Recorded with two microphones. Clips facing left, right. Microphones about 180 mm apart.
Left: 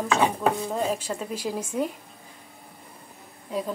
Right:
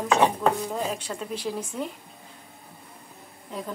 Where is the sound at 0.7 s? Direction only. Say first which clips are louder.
Left 3 dB; 5° left (ahead or behind).